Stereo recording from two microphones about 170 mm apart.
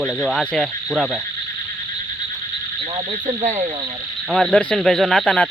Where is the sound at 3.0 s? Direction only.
45° right (ahead or behind).